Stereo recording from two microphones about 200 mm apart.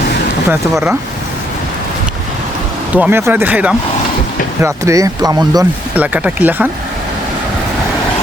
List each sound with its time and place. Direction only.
0.4 s speech: 10° right (ahead or behind)
2.9 s speech: 10° right (ahead or behind)
5.9 s speech: 5° right (ahead or behind)